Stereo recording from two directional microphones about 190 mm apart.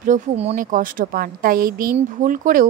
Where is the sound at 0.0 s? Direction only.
35° right (ahead or behind).